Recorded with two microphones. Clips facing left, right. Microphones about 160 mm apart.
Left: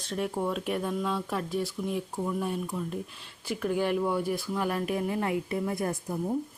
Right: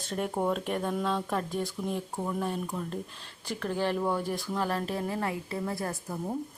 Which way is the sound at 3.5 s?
10° left (ahead or behind).